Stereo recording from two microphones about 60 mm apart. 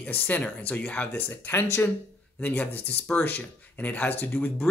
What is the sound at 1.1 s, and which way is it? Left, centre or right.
Speech, left.